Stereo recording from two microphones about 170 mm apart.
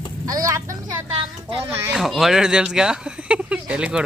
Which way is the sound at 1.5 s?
15° right (ahead or behind).